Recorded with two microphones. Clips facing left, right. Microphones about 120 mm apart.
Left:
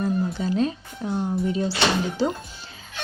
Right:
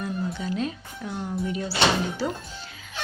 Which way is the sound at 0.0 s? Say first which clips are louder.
Left 5 dB; 35° left (ahead or behind).